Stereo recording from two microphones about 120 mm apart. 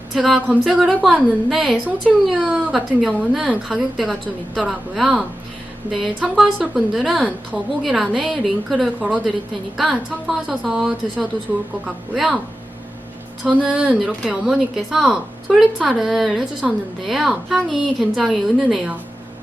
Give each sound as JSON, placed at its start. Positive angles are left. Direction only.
{"t": 0.1, "sound": "a woman's voice", "side_deg": -5}
{"t": 9.0, "sound": "a woman's voice", "side_deg": -10}
{"t": 13.4, "sound": "a woman's voice", "side_deg": -10}